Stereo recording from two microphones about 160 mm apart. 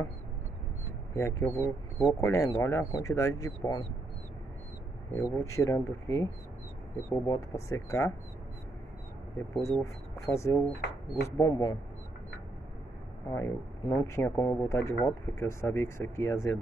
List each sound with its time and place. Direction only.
1.1 s speech: 15° left (ahead or behind)
5.1 s speech: 20° left (ahead or behind)
7.2 s speech: 20° left (ahead or behind)
9.6 s speech: 20° left (ahead or behind)
13.3 s speech: 20° left (ahead or behind)